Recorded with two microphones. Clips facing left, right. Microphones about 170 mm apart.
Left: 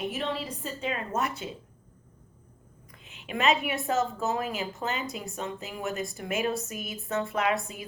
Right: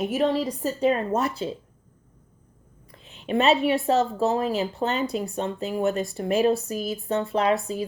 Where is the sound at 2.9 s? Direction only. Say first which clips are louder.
Right 10 dB; 35° right (ahead or behind).